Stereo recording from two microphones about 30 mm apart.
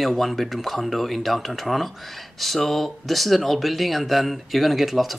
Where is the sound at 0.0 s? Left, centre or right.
Centre.